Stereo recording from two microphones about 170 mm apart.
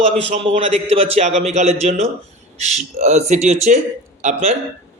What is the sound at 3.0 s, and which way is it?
Speech, 40° right (ahead or behind).